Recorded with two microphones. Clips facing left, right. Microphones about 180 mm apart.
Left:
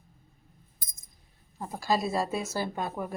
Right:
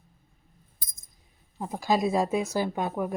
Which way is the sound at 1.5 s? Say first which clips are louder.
Right 3 dB; 15° right (ahead or behind).